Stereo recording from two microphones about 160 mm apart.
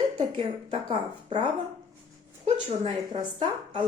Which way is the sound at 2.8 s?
30° right (ahead or behind).